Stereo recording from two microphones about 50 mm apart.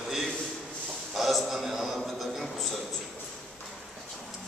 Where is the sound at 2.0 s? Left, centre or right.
Centre.